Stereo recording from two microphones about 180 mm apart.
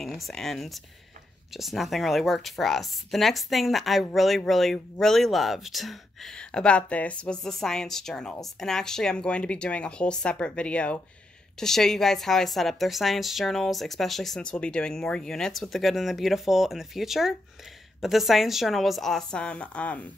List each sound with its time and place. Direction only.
0.0 s speech: centre (ahead or behind)